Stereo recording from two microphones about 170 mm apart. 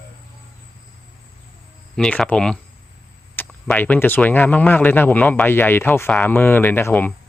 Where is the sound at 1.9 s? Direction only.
5° left (ahead or behind).